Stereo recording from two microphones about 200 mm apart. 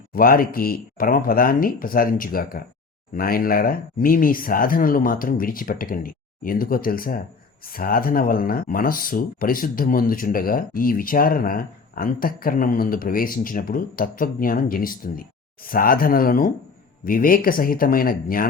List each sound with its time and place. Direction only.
0.1 s speech: 45° left (ahead or behind)